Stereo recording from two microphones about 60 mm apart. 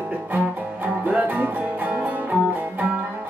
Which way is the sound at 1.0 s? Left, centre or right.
Right.